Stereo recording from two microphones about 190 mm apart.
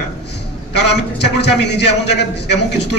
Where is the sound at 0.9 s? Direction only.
65° left (ahead or behind).